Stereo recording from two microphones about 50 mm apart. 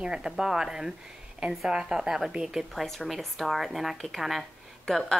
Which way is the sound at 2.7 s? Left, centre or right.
Centre.